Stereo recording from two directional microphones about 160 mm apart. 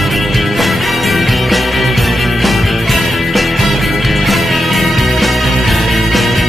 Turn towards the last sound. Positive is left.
turn(degrees=0)  # may be behind; listen again after turning